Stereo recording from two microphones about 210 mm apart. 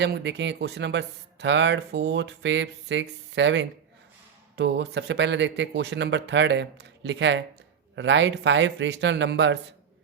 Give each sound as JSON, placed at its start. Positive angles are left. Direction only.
{"t": 0.0, "sound": "speech", "side_deg": -55}